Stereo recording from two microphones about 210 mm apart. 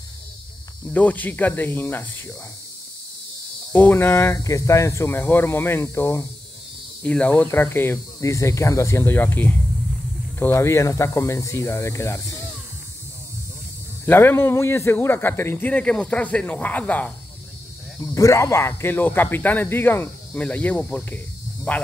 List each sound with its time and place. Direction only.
0.8 s speech: 5° left (ahead or behind)
3.7 s speech: 10° left (ahead or behind)
14.0 s speech: 10° left (ahead or behind)